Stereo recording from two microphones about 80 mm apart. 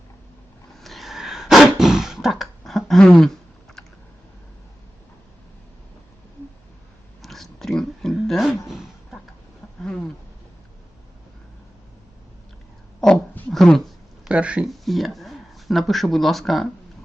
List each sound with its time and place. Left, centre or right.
0.8 s throat clearing: centre
7.2 s a sound: centre
9.8 s a sound: centre
13.5 s speech: centre
14.3 s speech: centre
14.7 s speech: centre